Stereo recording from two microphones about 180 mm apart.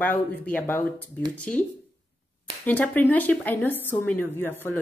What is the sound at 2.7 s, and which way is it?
Speech, 10° left (ahead or behind).